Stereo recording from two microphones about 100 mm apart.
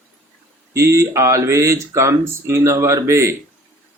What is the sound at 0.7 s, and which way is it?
A man's voice, 30° right (ahead or behind).